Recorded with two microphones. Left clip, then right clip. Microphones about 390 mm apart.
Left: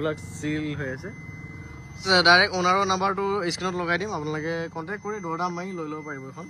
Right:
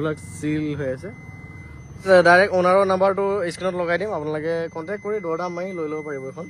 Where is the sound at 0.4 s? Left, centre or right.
Centre.